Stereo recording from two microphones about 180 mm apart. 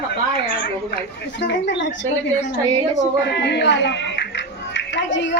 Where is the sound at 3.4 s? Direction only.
70° left (ahead or behind).